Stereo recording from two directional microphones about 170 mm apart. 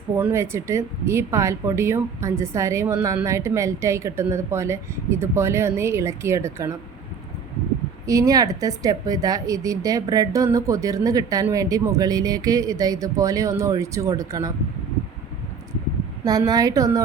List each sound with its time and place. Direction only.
0.2 s speech: 15° right (ahead or behind)
8.0 s a woman's voice: 20° right (ahead or behind)
16.2 s a woman's voice: 20° right (ahead or behind)